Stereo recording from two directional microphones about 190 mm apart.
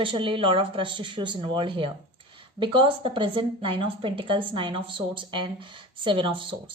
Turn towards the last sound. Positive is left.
turn(degrees=-25)  # may be behind; listen again after turning